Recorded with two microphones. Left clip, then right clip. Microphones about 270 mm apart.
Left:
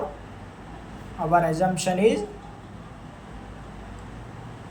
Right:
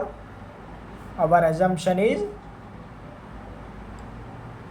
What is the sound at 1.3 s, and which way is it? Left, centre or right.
Speech, right.